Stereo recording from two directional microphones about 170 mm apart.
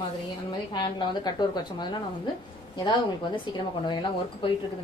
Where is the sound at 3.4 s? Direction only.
25° left (ahead or behind).